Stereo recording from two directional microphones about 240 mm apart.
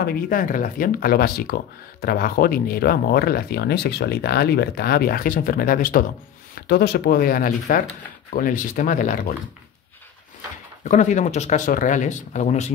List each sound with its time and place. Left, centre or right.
0.0 s speech: left
10.8 s speech: left